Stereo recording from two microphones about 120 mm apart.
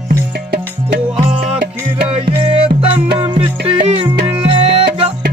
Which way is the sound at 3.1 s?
40° right (ahead or behind).